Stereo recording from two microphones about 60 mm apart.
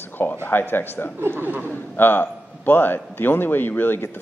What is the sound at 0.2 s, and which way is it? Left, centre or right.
Speech, left.